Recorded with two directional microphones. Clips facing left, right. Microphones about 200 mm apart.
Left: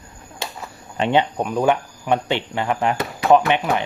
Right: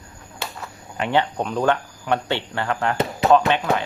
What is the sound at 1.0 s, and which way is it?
Speech, 20° left (ahead or behind).